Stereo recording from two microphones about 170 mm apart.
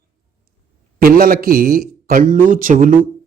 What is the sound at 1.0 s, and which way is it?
Speech, 60° right (ahead or behind).